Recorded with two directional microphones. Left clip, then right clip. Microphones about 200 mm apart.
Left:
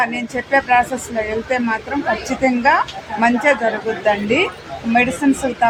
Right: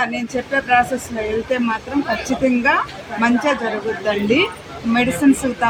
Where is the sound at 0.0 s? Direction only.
20° left (ahead or behind).